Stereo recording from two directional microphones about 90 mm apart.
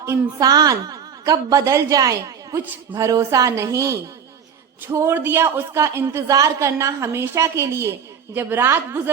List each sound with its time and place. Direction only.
0.0 s a woman's voice: 40° right (ahead or behind)
6.2 s a woman's voice: 40° right (ahead or behind)
8.3 s speech: 20° right (ahead or behind)